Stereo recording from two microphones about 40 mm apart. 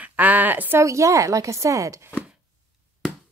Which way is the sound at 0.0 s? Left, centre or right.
Right.